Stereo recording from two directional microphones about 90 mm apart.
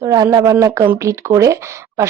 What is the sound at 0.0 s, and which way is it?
Speech, 40° right (ahead or behind).